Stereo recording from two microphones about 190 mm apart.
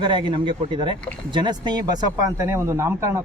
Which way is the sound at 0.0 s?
25° right (ahead or behind).